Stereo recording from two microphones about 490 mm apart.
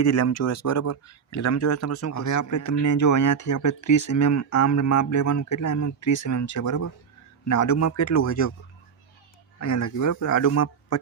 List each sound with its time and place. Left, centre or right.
0.0 s speech: left
9.6 s speech: left